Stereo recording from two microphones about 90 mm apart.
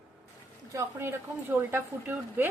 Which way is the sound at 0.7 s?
30° right (ahead or behind).